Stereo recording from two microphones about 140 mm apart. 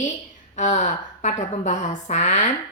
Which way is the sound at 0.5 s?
60° left (ahead or behind).